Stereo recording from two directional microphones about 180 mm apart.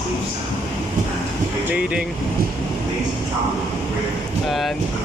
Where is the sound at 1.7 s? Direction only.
5° right (ahead or behind).